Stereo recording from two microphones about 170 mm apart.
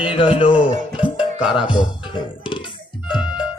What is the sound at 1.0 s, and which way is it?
Music, 10° right (ahead or behind).